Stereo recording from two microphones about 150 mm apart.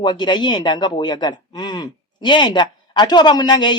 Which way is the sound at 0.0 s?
30° left (ahead or behind).